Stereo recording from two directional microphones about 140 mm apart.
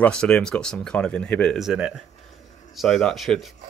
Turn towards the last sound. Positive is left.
turn(degrees=0)  # may be behind; listen again after turning